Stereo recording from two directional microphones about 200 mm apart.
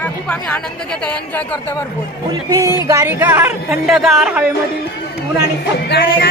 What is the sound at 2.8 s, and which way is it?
Music, 20° right (ahead or behind).